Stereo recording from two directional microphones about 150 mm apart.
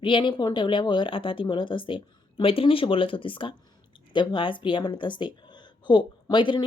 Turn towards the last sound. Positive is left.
turn(degrees=30)  # may be behind; listen again after turning